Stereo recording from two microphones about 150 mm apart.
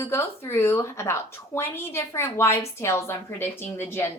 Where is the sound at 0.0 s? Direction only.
15° left (ahead or behind).